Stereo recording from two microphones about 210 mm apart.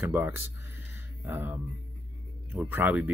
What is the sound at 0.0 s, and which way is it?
Speech, 10° right (ahead or behind).